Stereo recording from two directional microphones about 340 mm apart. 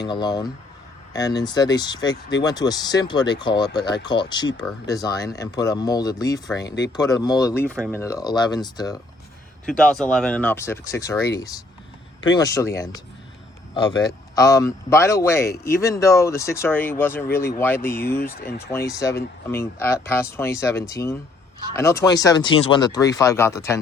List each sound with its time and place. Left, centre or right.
0.0 s speech: centre
6.6 s speech: left
6.9 s speech: centre
18.3 s speech: left
18.9 s speech: centre